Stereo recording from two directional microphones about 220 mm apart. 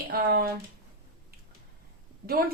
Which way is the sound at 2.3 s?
45° right (ahead or behind).